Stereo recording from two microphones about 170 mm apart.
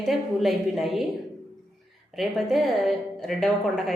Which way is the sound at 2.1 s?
Centre (ahead or behind).